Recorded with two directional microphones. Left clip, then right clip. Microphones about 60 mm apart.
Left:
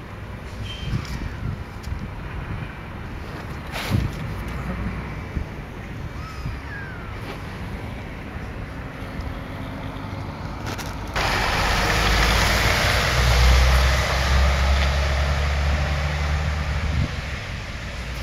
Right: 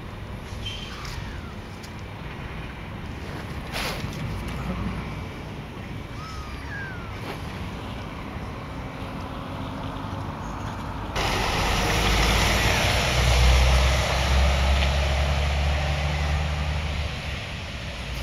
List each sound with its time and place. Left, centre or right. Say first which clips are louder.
11.1 s vehicle: left 3 dB; left